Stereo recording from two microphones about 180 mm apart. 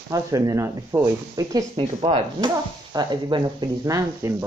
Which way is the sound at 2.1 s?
30° right (ahead or behind).